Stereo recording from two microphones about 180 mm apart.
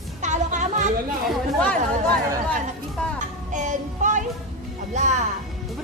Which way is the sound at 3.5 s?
45° right (ahead or behind).